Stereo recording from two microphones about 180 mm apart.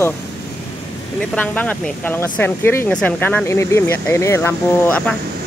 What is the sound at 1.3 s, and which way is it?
Speech, 10° left (ahead or behind).